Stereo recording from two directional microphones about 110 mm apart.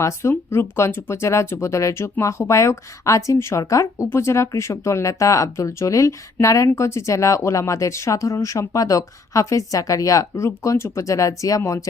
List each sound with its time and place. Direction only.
0.0 s speech: 25° left (ahead or behind)